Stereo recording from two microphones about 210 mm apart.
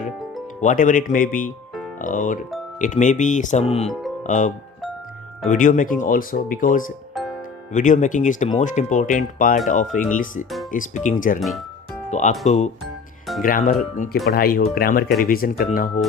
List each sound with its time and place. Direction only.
0.6 s speech: 40° left (ahead or behind)
7.1 s music: centre (ahead or behind)
7.7 s speech: 35° left (ahead or behind)
11.3 s speech: centre (ahead or behind)
12.1 s speech: 35° left (ahead or behind)